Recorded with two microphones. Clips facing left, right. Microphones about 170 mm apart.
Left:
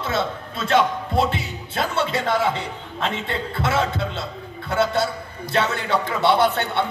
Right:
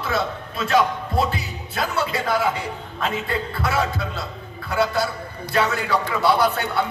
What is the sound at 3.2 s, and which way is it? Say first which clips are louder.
A man's voice: even; 25° left (ahead or behind).